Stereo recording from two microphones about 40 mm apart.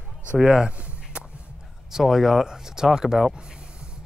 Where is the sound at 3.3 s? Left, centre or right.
Right.